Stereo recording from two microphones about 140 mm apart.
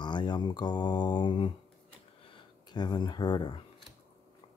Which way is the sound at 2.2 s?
35° left (ahead or behind).